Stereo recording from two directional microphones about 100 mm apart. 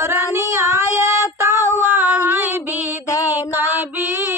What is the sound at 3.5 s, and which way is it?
Female singing, 20° right (ahead or behind).